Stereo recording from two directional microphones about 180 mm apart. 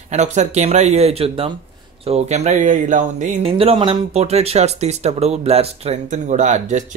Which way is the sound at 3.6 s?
30° right (ahead or behind).